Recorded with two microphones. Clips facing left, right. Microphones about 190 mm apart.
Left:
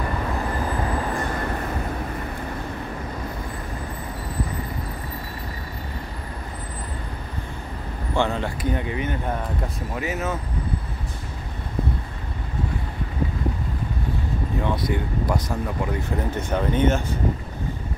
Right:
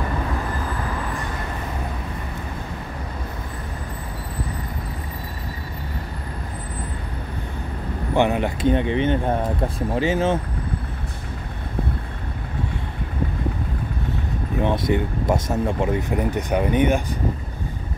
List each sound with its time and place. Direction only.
8.1 s speech: 15° right (ahead or behind)
14.6 s speech: 25° right (ahead or behind)